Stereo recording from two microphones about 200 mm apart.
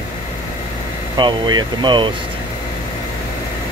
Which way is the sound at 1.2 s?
20° right (ahead or behind).